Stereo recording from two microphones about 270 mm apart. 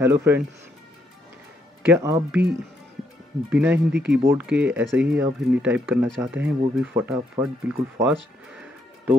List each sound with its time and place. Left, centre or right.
0.0 s speech: centre
1.8 s speech: centre
3.4 s speech: centre
3.9 s speech: right
4.3 s speech: centre